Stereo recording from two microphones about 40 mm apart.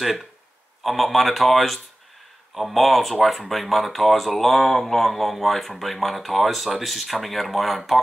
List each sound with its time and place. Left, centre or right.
0.0 s speech: centre